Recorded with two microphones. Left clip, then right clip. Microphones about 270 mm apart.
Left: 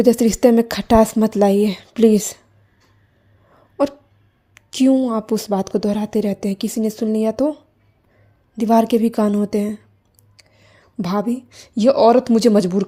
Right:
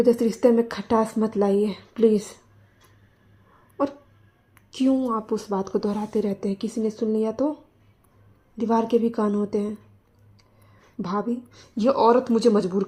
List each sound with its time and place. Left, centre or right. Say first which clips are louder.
0.0 s a woman's voice: left 5 dB; left
4.5 s a woman's voice: left 7 dB; left